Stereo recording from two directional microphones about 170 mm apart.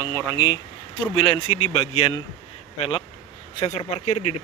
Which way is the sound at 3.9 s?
40° left (ahead or behind).